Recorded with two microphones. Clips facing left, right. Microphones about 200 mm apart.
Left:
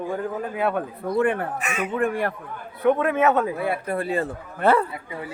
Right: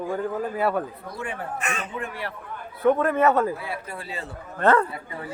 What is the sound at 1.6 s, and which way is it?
Speech, 5° left (ahead or behind).